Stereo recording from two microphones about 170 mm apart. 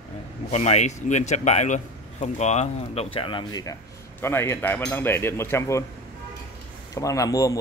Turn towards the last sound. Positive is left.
turn(degrees=20)  # may be behind; listen again after turning